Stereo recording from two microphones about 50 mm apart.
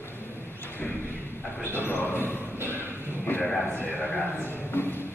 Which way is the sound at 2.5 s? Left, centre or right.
Right.